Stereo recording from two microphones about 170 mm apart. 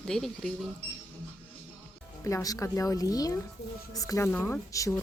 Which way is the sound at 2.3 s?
20° left (ahead or behind).